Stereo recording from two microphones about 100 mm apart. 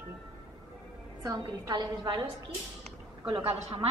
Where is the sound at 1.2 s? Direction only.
40° right (ahead or behind).